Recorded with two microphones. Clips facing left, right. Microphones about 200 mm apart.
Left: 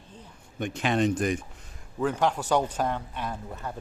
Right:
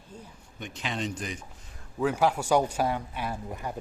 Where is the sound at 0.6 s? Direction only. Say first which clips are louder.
Left 8 dB; 55° left (ahead or behind).